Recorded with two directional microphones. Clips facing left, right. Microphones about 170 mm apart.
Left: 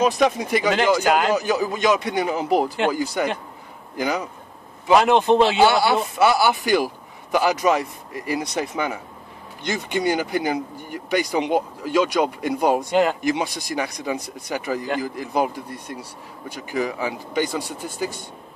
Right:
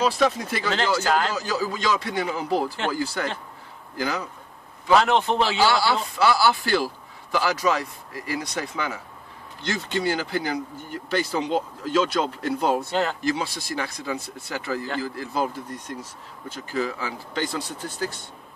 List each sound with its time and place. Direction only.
0.0 s speech: 20° left (ahead or behind)